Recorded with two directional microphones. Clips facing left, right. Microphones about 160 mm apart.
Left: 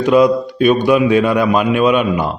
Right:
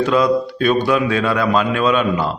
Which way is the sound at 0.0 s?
15° left (ahead or behind).